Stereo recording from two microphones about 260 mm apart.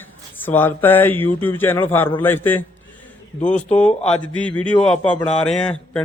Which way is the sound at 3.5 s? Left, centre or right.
Left.